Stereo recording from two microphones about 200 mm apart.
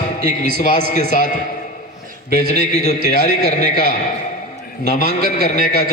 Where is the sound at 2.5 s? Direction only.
35° left (ahead or behind).